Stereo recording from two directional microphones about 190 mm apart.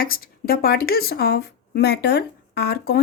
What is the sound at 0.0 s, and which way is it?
Speech, 50° left (ahead or behind).